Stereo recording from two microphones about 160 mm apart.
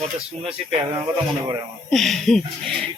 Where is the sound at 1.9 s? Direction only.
Centre (ahead or behind).